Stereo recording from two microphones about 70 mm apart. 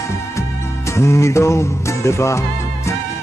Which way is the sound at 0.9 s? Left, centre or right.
Left.